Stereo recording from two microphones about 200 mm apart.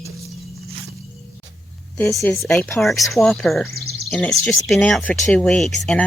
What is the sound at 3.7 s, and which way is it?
Bird, 50° right (ahead or behind).